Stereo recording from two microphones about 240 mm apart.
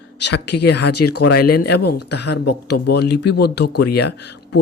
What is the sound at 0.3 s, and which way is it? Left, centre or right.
Speech, left.